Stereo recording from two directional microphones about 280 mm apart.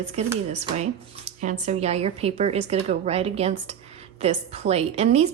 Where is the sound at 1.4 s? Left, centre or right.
Right.